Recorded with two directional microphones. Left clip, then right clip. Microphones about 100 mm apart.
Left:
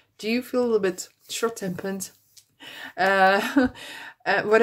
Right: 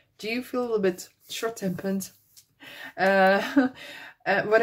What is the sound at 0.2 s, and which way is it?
Speech, 35° left (ahead or behind).